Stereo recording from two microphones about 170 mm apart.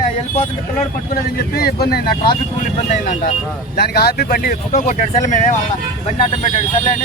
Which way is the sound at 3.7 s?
65° left (ahead or behind).